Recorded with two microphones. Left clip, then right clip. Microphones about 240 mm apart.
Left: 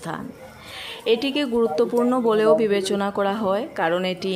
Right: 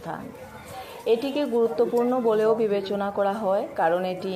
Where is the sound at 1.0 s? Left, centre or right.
Left.